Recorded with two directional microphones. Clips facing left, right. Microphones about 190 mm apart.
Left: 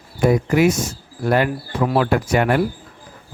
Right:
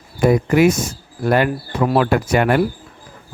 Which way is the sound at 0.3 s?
65° right (ahead or behind).